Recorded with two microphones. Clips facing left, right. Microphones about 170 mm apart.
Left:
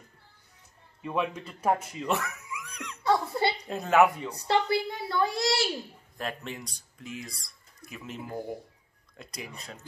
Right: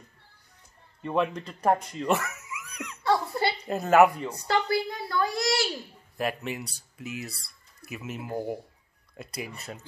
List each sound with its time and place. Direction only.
1.0 s speech: 5° left (ahead or behind)
3.0 s a sound: 20° left (ahead or behind)
3.6 s a woman's voice: centre (ahead or behind)
4.5 s a woman's voice: 25° left (ahead or behind)
6.1 s speech: 10° right (ahead or behind)